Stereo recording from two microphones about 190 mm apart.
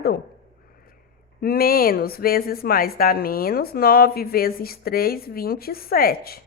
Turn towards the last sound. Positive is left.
turn(degrees=50)  # may be behind; listen again after turning